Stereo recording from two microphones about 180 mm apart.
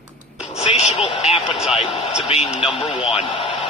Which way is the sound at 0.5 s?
35° left (ahead or behind).